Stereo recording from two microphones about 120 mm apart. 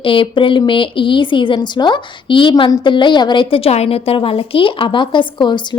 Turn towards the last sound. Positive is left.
turn(degrees=40)  # may be behind; listen again after turning